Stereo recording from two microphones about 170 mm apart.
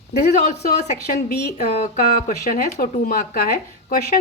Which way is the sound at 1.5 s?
45° left (ahead or behind).